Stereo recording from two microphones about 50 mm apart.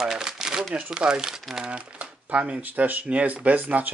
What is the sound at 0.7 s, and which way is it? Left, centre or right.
Speech, right.